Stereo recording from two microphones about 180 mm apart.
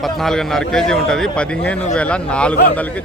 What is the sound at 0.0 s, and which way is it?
A man's voice, centre (ahead or behind).